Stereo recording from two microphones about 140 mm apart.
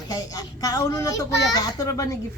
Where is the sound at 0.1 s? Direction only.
25° left (ahead or behind).